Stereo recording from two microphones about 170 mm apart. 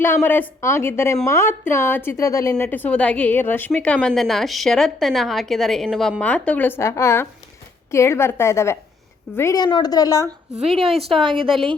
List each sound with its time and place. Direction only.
0.0 s speech: 10° left (ahead or behind)
9.6 s a woman's voice: 25° left (ahead or behind)
11.2 s a woman's voice: 30° right (ahead or behind)